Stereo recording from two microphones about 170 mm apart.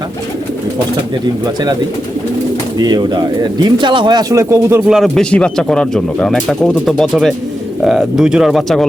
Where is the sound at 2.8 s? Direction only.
25° right (ahead or behind).